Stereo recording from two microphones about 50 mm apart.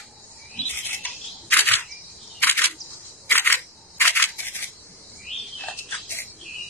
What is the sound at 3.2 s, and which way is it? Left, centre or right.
Scissors, left.